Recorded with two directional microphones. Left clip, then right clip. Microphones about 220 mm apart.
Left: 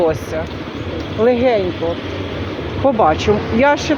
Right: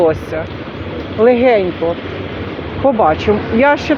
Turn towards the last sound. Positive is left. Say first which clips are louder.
# right 2 dB
turn(degrees=-10)  # may be behind; listen again after turning